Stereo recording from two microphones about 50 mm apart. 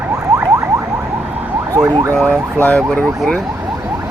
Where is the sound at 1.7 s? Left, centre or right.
Right.